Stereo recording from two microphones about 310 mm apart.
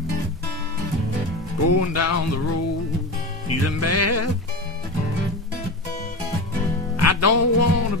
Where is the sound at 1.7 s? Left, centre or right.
Left.